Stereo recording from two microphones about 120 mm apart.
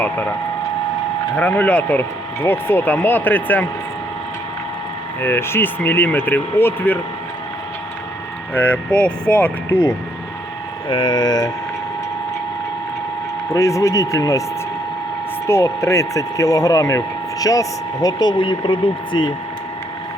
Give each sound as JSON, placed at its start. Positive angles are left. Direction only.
{"t": 0.0, "sound": "speech", "side_deg": 15}
{"t": 1.4, "sound": "speech", "side_deg": 15}
{"t": 5.2, "sound": "speech", "side_deg": 20}
{"t": 8.5, "sound": "speech", "side_deg": 15}
{"t": 9.6, "sound": "speech", "side_deg": 20}
{"t": 10.8, "sound": "speech", "side_deg": 40}
{"t": 13.5, "sound": "speech", "side_deg": 25}
{"t": 15.4, "sound": "speech", "side_deg": 25}